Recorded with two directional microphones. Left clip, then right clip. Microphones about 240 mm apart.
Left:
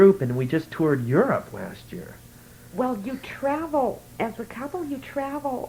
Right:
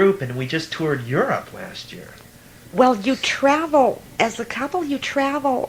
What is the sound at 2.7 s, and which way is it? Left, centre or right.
Speech, right.